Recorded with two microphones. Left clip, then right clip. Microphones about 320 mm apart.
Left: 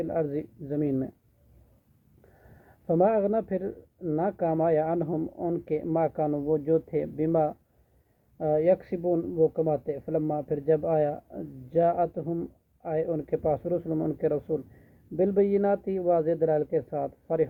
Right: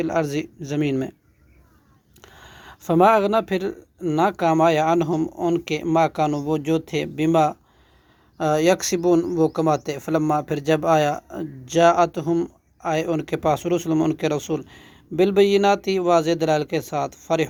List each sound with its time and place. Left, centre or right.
0.0 s speech: right
2.8 s speech: right
15.4 s speech: centre
16.0 s speech: right